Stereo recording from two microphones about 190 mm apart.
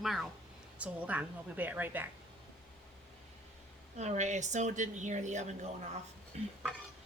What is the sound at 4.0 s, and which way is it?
Speech, 35° right (ahead or behind).